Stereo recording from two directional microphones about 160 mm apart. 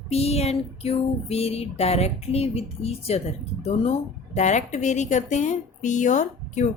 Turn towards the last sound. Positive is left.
turn(degrees=50)  # may be behind; listen again after turning